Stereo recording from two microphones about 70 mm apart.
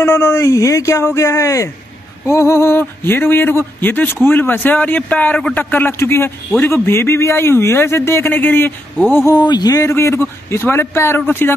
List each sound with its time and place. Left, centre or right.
0.0 s speech: left
9.5 s a man's voice: left
9.8 s speech: left